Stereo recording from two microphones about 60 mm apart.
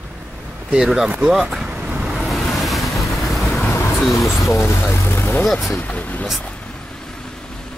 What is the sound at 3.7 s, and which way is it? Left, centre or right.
Vehicle, left.